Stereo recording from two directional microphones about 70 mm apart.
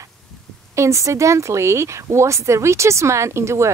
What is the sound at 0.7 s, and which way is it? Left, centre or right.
Speech, right.